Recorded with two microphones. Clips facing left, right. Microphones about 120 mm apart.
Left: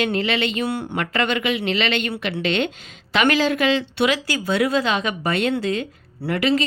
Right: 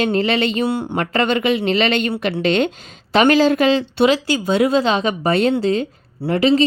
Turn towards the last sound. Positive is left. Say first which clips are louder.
# right 5 dB
turn(degrees=-30)  # may be behind; listen again after turning